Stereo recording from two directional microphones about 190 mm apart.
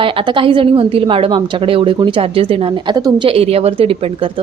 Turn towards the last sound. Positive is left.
turn(degrees=-30)  # may be behind; listen again after turning